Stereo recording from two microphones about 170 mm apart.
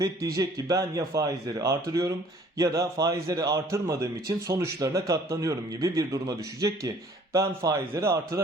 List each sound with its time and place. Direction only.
0.0 s a man's voice: 20° right (ahead or behind)